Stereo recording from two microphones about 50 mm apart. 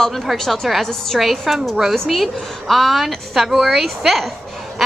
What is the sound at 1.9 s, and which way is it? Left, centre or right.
A woman's voice, centre.